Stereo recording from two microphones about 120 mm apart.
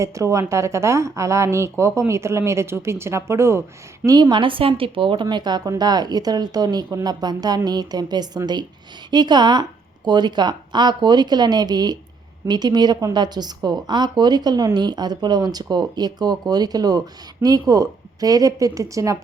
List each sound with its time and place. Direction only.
0.0 s speech: 25° right (ahead or behind)
4.0 s speech: 35° right (ahead or behind)